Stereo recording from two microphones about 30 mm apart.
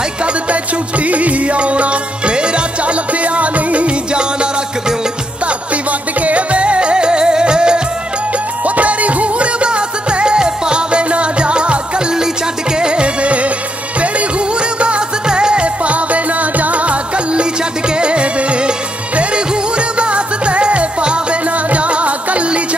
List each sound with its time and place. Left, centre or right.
0.2 s music: right
2.8 s music: right
4.1 s music: right
5.9 s music: right
8.6 s music: right
14.8 s music: right
15.2 s music: right
20.0 s music: right